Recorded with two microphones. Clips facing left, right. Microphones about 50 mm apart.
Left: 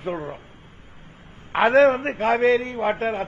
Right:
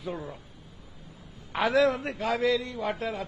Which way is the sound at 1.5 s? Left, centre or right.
Left.